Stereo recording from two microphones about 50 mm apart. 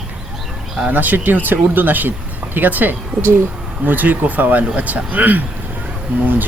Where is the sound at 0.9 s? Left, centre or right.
Right.